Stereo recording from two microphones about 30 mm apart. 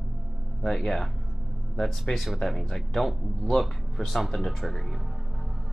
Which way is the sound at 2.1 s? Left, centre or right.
Left.